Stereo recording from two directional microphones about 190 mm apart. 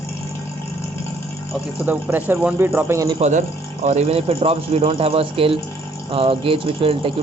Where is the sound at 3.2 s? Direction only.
40° right (ahead or behind).